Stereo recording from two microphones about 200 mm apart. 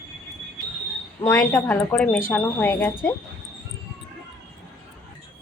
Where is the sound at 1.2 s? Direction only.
5° left (ahead or behind).